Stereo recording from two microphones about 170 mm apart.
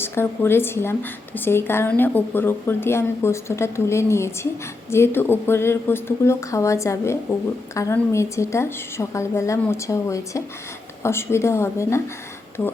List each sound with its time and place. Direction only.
0.0 s a woman's voice: 15° left (ahead or behind)